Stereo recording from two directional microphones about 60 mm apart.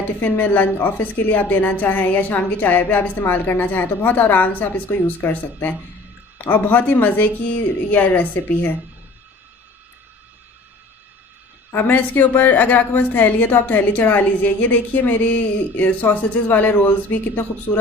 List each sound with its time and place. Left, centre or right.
0.2 s a woman's voice: left
11.7 s a woman's voice: left